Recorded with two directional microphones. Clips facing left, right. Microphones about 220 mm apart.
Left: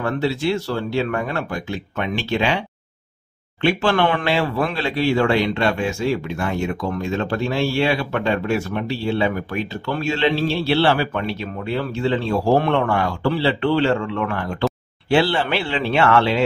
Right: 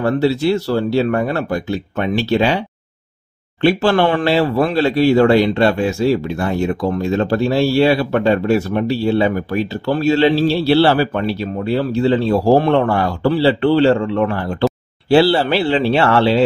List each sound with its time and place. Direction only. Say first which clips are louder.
0.0 s speech: right 6 dB; 40° right (ahead or behind)
3.6 s speech: right 5 dB; 35° right (ahead or behind)